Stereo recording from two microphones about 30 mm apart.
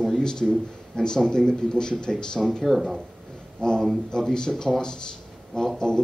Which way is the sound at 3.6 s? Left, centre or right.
Left.